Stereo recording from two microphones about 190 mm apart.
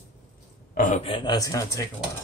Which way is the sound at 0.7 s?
45° left (ahead or behind).